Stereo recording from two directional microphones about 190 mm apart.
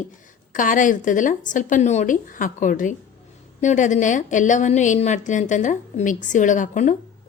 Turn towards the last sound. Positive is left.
turn(degrees=40)  # may be behind; listen again after turning